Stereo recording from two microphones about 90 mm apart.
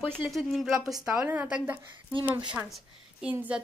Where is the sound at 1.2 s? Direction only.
20° right (ahead or behind).